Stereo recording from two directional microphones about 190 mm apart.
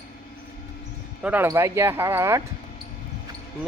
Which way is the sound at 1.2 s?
10° right (ahead or behind).